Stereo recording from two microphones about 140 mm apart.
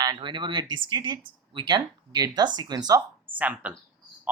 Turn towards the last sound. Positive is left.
turn(degrees=-10)  # may be behind; listen again after turning